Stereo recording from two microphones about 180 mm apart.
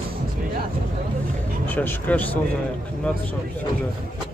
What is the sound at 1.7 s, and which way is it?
Speech, 10° left (ahead or behind).